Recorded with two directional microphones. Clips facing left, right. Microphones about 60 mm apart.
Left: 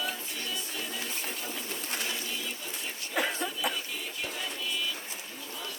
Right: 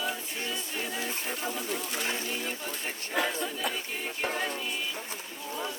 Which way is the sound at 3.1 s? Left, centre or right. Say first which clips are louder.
Right 1 dB; left.